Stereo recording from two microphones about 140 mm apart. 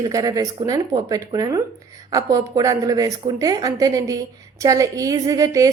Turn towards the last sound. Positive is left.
turn(degrees=-25)  # may be behind; listen again after turning